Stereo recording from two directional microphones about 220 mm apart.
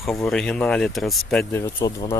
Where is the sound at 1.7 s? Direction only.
20° left (ahead or behind).